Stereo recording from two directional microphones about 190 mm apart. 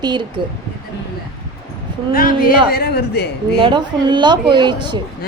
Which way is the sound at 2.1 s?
50° left (ahead or behind).